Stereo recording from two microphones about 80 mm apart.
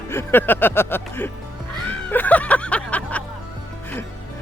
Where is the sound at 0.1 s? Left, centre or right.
Left.